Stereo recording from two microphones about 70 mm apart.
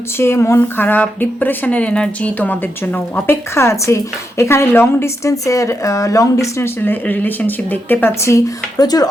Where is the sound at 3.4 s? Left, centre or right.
Left.